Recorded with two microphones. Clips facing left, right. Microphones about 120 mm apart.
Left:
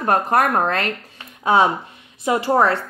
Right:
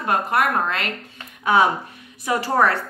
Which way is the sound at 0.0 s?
40° left (ahead or behind).